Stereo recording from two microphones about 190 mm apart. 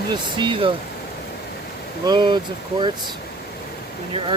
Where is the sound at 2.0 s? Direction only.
20° right (ahead or behind).